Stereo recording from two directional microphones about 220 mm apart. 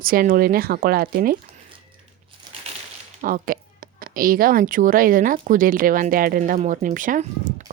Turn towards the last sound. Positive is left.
turn(degrees=-35)  # may be behind; listen again after turning